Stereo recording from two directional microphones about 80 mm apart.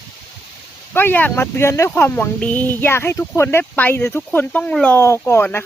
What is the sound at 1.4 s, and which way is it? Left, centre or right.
Speech, left.